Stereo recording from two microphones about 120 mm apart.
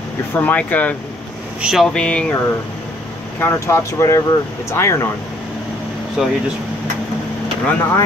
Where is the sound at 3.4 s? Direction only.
25° left (ahead or behind).